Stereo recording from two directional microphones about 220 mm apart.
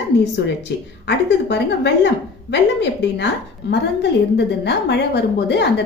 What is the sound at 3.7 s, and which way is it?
A woman's voice, 50° left (ahead or behind).